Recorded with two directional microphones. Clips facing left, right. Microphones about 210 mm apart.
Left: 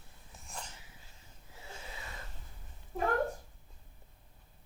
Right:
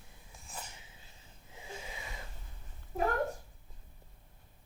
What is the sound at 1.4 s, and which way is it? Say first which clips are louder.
Wheeze: right 3 dB; 15° right (ahead or behind).